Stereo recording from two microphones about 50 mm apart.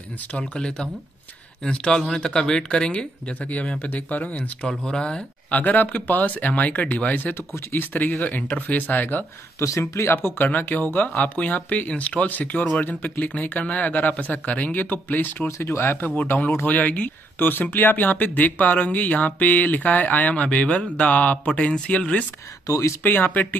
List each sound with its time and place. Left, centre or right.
0.2 s speech: left
3.3 s speech: left
4.6 s speech: centre
5.5 s speech: left
7.7 s speech: left
9.6 s speech: left
10.1 s speech: left
15.4 s speech: left
16.2 s speech: left
23.0 s speech: left